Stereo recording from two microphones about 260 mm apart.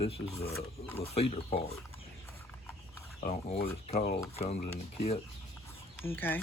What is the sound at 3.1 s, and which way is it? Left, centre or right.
Speech, left.